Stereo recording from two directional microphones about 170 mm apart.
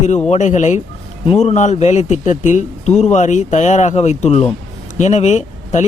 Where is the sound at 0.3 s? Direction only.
45° left (ahead or behind).